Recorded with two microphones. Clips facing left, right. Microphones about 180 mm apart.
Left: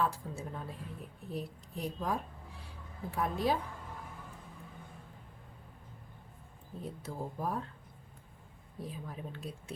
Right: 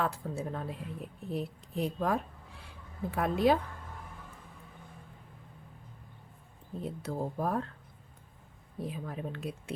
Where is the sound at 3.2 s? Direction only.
70° right (ahead or behind).